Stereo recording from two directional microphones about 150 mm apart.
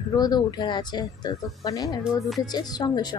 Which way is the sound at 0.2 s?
25° left (ahead or behind).